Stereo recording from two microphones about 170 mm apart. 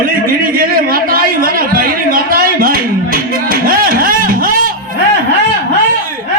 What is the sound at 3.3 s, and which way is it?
Music, 60° right (ahead or behind).